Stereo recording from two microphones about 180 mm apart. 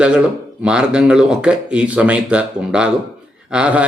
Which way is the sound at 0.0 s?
5° right (ahead or behind).